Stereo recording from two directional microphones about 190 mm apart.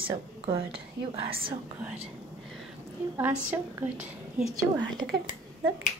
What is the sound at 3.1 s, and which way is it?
A woman's voice, 10° right (ahead or behind).